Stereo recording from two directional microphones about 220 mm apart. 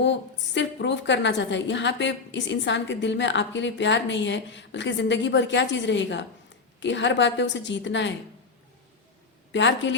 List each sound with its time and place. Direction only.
0.0 s a woman's voice: 55° left (ahead or behind)
9.5 s a woman's voice: 55° left (ahead or behind)